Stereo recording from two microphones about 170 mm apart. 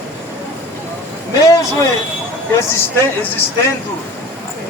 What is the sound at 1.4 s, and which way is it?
Speech, 20° left (ahead or behind).